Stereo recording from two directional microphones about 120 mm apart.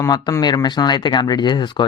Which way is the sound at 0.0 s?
30° left (ahead or behind).